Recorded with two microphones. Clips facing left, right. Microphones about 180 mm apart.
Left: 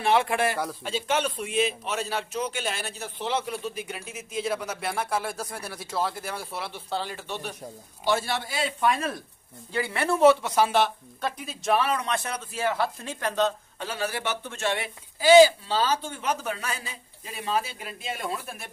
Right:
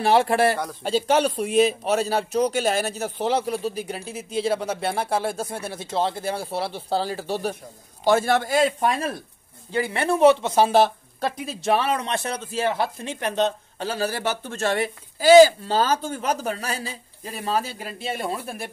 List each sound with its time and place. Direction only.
0.0 s speech: 35° right (ahead or behind)
8.0 s speech: 45° right (ahead or behind)
9.7 s speech: 20° right (ahead or behind)